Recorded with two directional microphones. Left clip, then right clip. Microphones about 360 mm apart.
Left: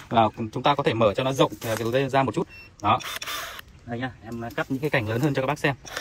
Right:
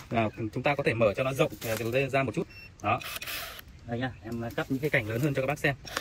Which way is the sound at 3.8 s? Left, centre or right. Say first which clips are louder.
Left 2 dB; centre.